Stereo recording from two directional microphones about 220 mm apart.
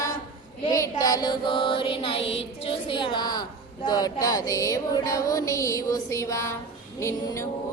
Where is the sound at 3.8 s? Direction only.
15° left (ahead or behind).